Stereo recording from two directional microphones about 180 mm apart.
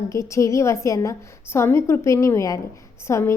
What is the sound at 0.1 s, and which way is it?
A woman's voice, 15° left (ahead or behind).